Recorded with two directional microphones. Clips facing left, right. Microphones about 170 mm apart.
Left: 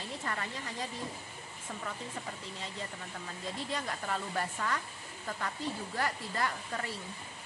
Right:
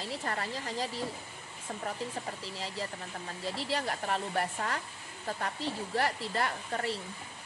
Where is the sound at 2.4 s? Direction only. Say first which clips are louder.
Right 4 dB; 30° right (ahead or behind).